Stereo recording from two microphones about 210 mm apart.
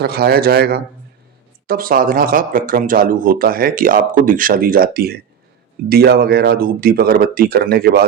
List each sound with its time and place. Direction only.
0.0 s speech: 50° right (ahead or behind)